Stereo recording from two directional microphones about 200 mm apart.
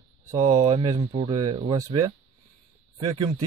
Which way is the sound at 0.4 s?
35° right (ahead or behind).